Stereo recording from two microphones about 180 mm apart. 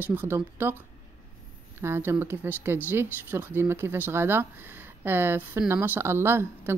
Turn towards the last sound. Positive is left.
turn(degrees=-15)  # may be behind; listen again after turning